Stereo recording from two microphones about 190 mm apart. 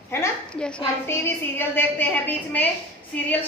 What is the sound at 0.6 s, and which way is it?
A woman's voice, 5° left (ahead or behind).